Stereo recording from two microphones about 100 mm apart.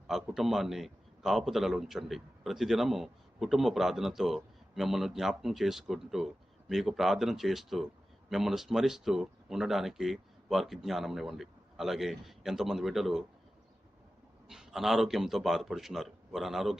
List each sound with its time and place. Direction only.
0.1 s a man's voice: 5° right (ahead or behind)
14.4 s a man's voice: 5° right (ahead or behind)